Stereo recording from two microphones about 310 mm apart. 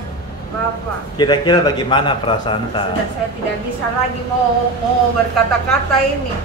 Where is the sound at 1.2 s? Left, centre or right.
Centre.